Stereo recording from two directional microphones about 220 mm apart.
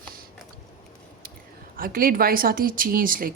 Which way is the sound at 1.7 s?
40° right (ahead or behind).